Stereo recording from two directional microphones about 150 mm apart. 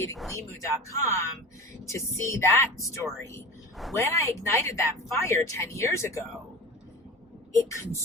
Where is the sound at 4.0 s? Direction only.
20° left (ahead or behind).